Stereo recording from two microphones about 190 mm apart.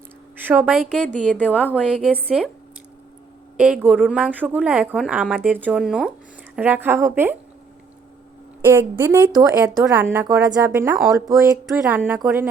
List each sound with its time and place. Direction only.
0.4 s speech: 5° right (ahead or behind)
1.2 s a woman's voice: 5° left (ahead or behind)
1.9 s speech: 5° right (ahead or behind)
3.6 s speech: 5° right (ahead or behind)
8.6 s speech: 10° right (ahead or behind)
11.5 s speech: 5° right (ahead or behind)